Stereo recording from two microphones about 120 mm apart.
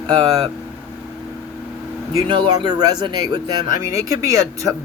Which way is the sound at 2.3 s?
40° right (ahead or behind).